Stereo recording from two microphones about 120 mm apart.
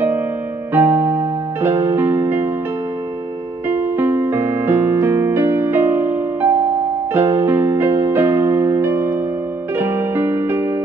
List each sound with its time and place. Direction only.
0.7 s music: 20° right (ahead or behind)
3.6 s music: 20° right (ahead or behind)